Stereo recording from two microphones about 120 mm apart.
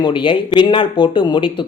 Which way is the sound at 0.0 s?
45° left (ahead or behind).